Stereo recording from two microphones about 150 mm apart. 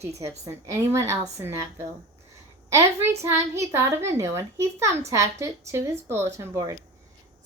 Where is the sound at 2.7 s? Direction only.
20° right (ahead or behind).